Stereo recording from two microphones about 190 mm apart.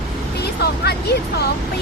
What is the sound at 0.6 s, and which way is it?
Speech, 60° left (ahead or behind).